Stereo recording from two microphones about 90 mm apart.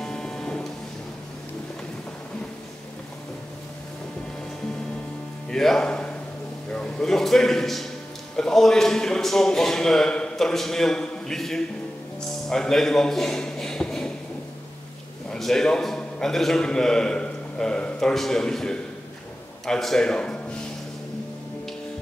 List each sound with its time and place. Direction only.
0.0 s music: 5° left (ahead or behind)
5.5 s a man's voice: 5° left (ahead or behind)
12.4 s a sound: 5° left (ahead or behind)
15.3 s a man's voice: 5° left (ahead or behind)